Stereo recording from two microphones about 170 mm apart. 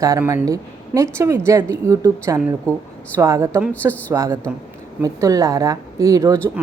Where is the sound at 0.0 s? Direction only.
20° right (ahead or behind).